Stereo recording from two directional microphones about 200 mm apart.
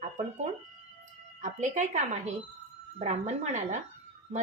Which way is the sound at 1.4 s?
35° right (ahead or behind).